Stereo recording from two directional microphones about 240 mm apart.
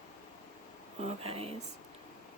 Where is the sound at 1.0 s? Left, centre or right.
Right.